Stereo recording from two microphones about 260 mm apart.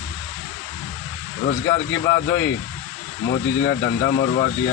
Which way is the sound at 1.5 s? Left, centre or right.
Left.